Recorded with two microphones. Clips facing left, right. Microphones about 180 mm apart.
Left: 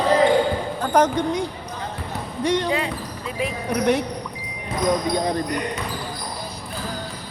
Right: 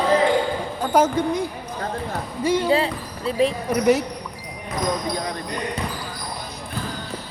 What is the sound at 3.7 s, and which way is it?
Speech, 5° right (ahead or behind).